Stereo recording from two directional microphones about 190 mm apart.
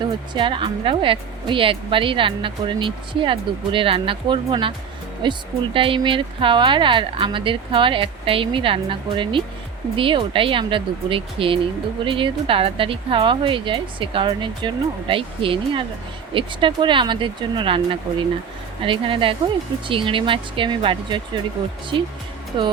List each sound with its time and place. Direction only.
0.3 s speech: 25° right (ahead or behind)
18.8 s speech: 25° right (ahead or behind)